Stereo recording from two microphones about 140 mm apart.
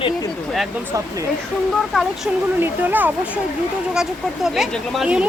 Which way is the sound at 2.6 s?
15° right (ahead or behind).